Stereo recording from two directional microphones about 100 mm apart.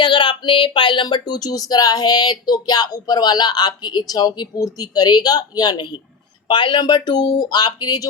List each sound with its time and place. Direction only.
0.0 s speech: 55° left (ahead or behind)